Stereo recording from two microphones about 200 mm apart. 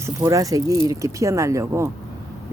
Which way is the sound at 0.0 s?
15° right (ahead or behind).